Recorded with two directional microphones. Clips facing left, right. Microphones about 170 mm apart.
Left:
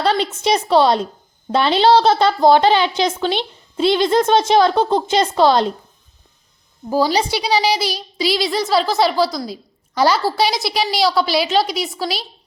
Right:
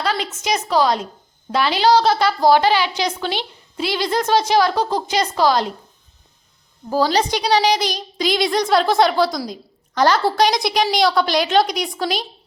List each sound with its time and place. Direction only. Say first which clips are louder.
0.0 s a woman's voice: left 5 dB; 30° left (ahead or behind)
6.9 s a woman's voice: left 1 dB; 10° left (ahead or behind)